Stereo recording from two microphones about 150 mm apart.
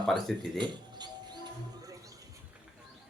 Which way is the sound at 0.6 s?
30° right (ahead or behind).